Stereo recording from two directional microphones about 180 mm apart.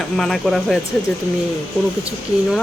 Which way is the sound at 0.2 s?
Centre (ahead or behind).